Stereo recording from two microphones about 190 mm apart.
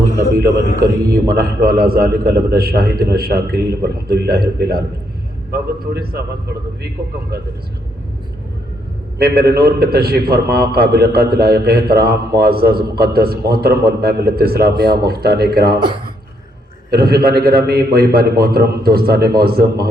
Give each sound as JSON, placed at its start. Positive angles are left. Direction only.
{"t": 0.8, "sound": "a man's voice", "side_deg": -55}
{"t": 9.1, "sound": "a man's voice", "side_deg": -55}
{"t": 16.9, "sound": "a man's voice", "side_deg": -55}